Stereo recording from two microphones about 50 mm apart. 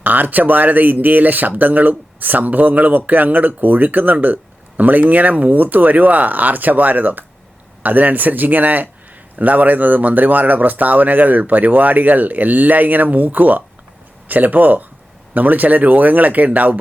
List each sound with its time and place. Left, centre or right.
0.0 s speech: right